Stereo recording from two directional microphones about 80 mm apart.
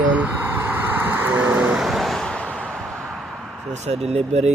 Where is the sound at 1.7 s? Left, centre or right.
Centre.